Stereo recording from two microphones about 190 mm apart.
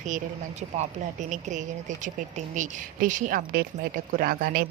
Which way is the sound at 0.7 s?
40° right (ahead or behind).